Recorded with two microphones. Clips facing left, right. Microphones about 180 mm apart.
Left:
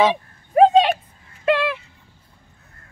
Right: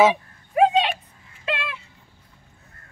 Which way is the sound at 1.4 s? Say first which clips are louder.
Left 10 dB; 60° left (ahead or behind).